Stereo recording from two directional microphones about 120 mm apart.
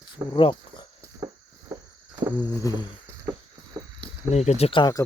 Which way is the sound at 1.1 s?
30° right (ahead or behind).